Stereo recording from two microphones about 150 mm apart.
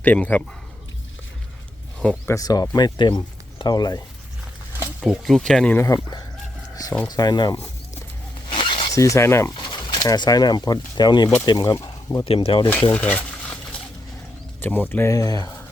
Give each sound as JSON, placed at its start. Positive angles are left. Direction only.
{"t": 0.0, "sound": "a man's voice", "side_deg": 10}
{"t": 2.0, "sound": "speech", "side_deg": 5}
{"t": 2.3, "sound": "speech", "side_deg": 25}
{"t": 4.8, "sound": "speech", "side_deg": -5}
{"t": 5.7, "sound": "speech", "side_deg": 20}
{"t": 8.4, "sound": "zipper", "side_deg": 35}
{"t": 8.9, "sound": "speech", "side_deg": 20}
{"t": 9.6, "sound": "speech", "side_deg": 30}
{"t": 12.2, "sound": "speech", "side_deg": 40}
{"t": 12.6, "sound": "a sound", "side_deg": 15}
{"t": 14.6, "sound": "speech", "side_deg": 10}